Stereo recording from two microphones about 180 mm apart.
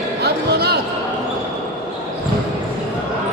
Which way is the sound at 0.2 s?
60° right (ahead or behind).